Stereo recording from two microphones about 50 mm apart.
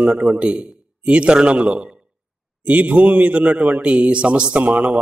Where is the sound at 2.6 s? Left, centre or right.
Right.